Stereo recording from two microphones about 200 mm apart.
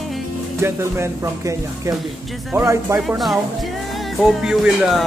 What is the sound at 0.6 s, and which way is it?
Speech, 15° right (ahead or behind).